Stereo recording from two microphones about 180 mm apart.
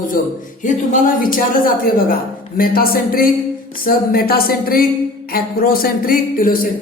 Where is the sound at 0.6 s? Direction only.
45° left (ahead or behind).